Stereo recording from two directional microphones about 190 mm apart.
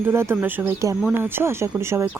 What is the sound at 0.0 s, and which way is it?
Speech, 10° right (ahead or behind).